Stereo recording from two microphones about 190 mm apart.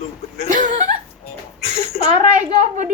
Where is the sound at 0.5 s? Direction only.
40° right (ahead or behind).